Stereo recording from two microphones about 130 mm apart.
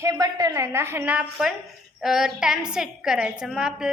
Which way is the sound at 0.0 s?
25° right (ahead or behind).